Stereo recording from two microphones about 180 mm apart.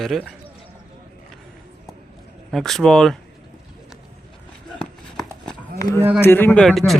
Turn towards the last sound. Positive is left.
turn(degrees=0)  # may be behind; listen again after turning